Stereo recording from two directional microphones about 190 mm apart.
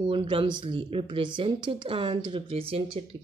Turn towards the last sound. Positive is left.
turn(degrees=-30)  # may be behind; listen again after turning